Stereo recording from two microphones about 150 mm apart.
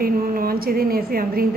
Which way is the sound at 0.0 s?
80° right.